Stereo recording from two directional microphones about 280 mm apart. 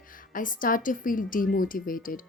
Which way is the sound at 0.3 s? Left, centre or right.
Left.